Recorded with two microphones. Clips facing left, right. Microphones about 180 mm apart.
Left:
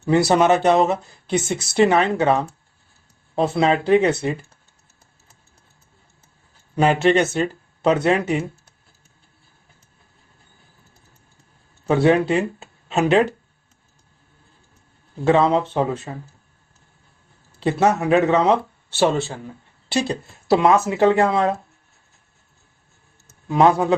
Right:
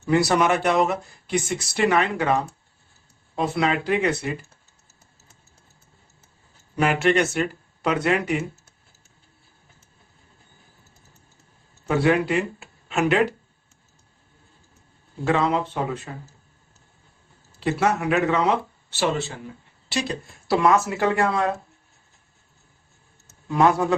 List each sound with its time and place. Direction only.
0.0 s speech: 25° left (ahead or behind)
6.7 s speech: 25° left (ahead or behind)
11.9 s speech: 30° left (ahead or behind)
15.3 s speech: 30° left (ahead or behind)
17.6 s speech: 30° left (ahead or behind)
19.9 s speech: 25° left (ahead or behind)
23.5 s speech: 20° left (ahead or behind)